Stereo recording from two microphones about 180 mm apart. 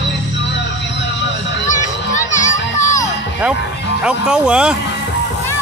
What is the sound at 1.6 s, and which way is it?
Children playing, 45° left (ahead or behind).